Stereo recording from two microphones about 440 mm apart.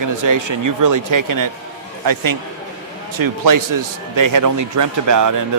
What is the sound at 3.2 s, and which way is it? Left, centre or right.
Speech, right.